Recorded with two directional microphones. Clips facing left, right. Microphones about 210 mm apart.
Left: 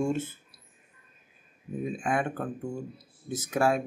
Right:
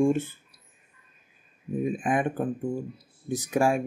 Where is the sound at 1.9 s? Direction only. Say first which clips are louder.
Right 3 dB; 15° right (ahead or behind).